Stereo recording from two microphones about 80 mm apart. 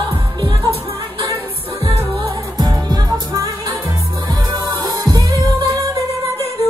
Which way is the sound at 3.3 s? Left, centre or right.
Right.